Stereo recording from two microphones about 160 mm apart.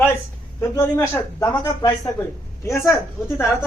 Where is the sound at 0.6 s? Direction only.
15° left (ahead or behind).